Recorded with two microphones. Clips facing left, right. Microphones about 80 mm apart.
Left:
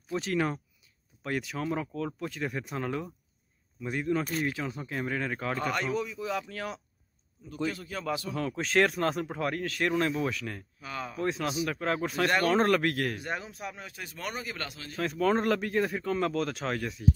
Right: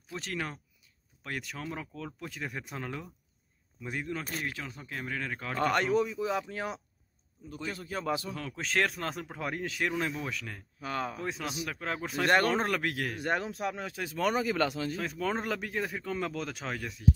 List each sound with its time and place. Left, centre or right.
0.1 s speech: centre
5.6 s speech: right
6.1 s a man's voice: right
8.3 s speech: centre
10.8 s speech: right
11.1 s speech: centre
13.2 s speech: right
13.5 s speech: right
15.0 s speech: centre